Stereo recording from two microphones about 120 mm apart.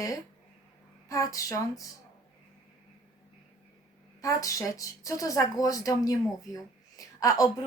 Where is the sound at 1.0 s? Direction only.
30° left (ahead or behind).